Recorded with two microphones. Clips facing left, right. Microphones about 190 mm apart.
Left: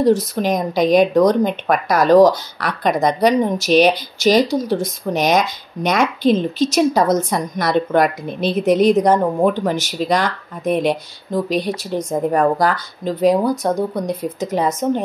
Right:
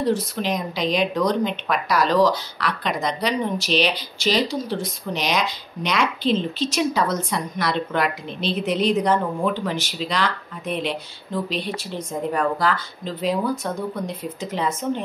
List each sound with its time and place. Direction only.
0.0 s speech: 45° left (ahead or behind)